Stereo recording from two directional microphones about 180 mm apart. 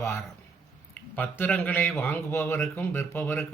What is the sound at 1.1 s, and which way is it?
Speech, 10° left (ahead or behind).